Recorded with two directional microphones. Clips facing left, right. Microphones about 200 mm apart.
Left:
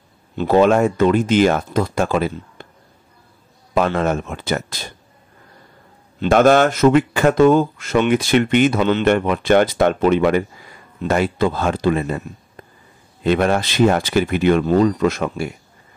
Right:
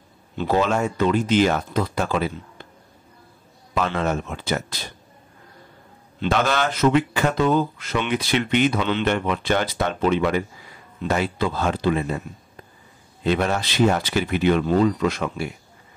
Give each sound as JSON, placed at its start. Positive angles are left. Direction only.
{"t": 0.4, "sound": "speech", "side_deg": 55}
{"t": 3.7, "sound": "speech", "side_deg": 50}
{"t": 6.2, "sound": "speech", "side_deg": 50}
{"t": 13.2, "sound": "speech", "side_deg": 55}